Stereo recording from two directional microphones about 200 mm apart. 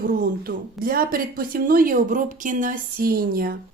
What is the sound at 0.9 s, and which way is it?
Speech, 45° right (ahead or behind).